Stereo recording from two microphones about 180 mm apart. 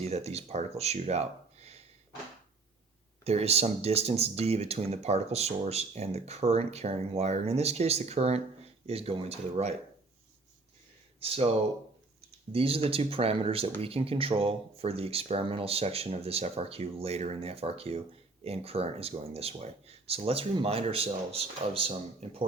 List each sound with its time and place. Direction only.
0.0 s speech: 35° right (ahead or behind)
3.2 s speech: 35° right (ahead or behind)
11.2 s speech: 30° right (ahead or behind)
12.5 s speech: 30° right (ahead or behind)